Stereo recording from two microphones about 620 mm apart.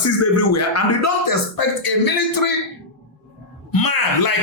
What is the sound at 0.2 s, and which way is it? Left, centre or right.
A man's voice, left.